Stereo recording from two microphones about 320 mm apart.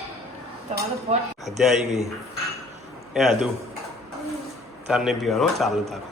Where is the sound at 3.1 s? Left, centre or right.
Centre.